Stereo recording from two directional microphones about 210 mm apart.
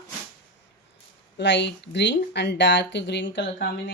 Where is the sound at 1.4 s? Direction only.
55° left (ahead or behind).